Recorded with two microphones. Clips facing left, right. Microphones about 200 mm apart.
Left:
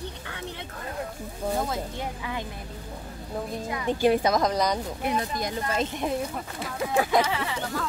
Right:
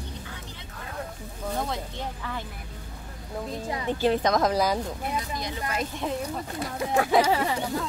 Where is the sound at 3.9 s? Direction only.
15° left (ahead or behind).